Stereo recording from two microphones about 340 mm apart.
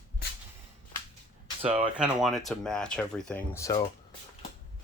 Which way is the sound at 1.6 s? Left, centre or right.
Centre.